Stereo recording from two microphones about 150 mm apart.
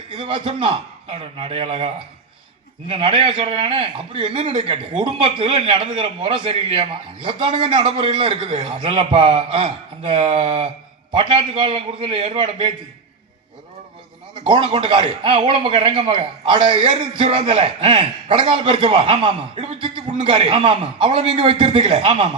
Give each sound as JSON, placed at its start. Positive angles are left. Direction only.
{"t": 0.1, "sound": "speech", "side_deg": -35}
{"t": 2.9, "sound": "speech", "side_deg": -35}
{"t": 14.3, "sound": "speech", "side_deg": -35}